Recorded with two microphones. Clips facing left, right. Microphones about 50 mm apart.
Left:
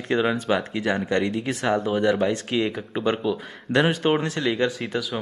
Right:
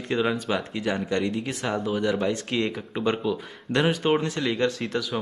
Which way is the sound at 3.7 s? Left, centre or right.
Centre.